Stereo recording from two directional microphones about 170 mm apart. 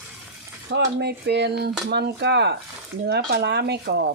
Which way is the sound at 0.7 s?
75° right (ahead or behind).